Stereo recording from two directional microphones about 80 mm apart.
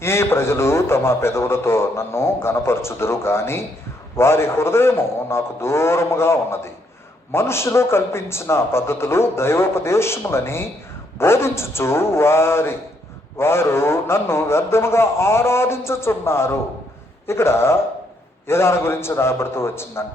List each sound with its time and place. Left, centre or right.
0.0 s speech: left